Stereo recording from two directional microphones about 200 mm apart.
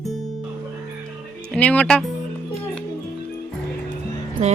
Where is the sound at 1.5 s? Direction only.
5° left (ahead or behind).